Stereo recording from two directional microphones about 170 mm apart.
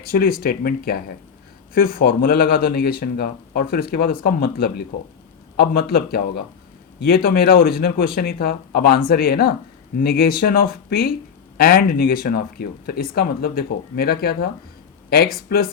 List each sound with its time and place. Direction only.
0.1 s speech: 60° left (ahead or behind)